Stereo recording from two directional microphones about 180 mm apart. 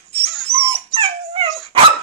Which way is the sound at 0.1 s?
35° right (ahead or behind).